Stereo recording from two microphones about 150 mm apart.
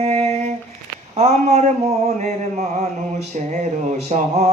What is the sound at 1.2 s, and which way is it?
Speech, 45° right (ahead or behind).